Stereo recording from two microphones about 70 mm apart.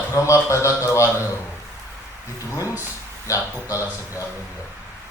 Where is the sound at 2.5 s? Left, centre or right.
Left.